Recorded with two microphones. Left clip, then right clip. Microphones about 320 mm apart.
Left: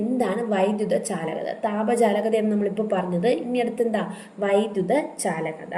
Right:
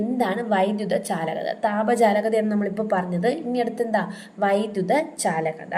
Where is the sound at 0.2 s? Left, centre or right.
Right.